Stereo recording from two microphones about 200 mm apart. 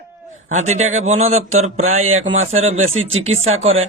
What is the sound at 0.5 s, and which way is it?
Speech, 35° right (ahead or behind).